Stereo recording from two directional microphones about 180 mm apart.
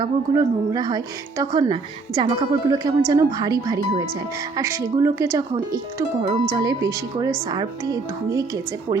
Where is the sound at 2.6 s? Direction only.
20° right (ahead or behind).